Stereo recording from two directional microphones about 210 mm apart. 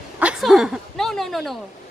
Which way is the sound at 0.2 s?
5° right (ahead or behind).